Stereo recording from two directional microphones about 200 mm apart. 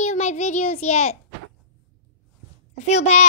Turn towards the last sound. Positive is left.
turn(degrees=35)  # may be behind; listen again after turning